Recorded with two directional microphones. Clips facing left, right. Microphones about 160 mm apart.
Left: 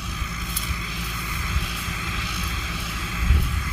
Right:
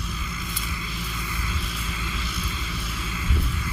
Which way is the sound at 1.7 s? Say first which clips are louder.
Even; 75° left (ahead or behind).